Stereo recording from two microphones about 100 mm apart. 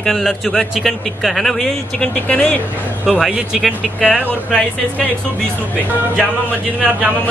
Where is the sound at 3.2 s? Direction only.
5° right (ahead or behind).